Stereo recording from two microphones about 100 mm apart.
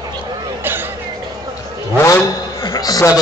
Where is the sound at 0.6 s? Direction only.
20° right (ahead or behind).